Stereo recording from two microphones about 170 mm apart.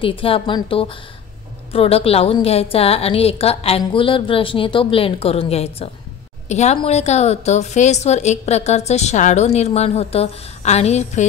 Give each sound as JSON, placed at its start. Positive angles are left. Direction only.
{"t": 0.0, "sound": "a woman's voice", "side_deg": 30}